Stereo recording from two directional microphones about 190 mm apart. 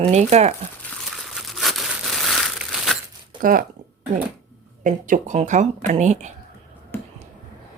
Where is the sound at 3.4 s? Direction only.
45° right (ahead or behind).